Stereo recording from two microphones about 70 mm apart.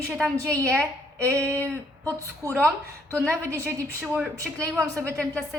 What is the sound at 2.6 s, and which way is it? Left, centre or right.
Speech, right.